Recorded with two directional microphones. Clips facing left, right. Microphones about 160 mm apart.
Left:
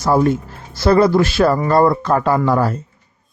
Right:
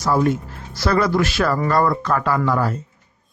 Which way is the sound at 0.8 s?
30° left (ahead or behind).